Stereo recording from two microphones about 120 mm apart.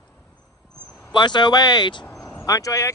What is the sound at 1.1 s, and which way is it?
Speech, 40° left (ahead or behind).